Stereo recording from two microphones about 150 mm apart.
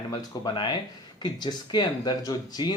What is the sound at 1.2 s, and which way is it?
Speech, 30° left (ahead or behind).